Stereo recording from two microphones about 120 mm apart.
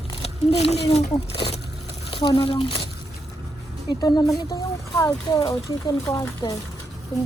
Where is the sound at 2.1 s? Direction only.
45° left (ahead or behind).